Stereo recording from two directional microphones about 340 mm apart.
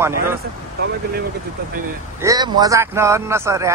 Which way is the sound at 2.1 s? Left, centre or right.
Centre.